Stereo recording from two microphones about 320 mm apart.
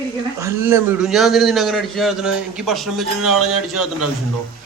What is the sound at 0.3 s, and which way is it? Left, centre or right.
A man's voice, centre.